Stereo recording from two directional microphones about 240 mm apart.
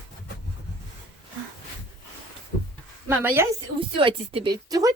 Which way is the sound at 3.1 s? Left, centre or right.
Centre.